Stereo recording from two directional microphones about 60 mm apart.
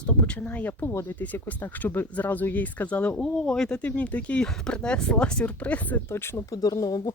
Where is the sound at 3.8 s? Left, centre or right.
Left.